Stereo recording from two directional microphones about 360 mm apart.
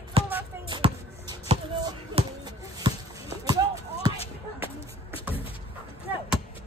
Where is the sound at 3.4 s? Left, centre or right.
Centre.